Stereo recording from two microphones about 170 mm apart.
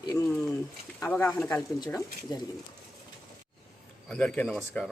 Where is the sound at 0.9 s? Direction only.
15° left (ahead or behind).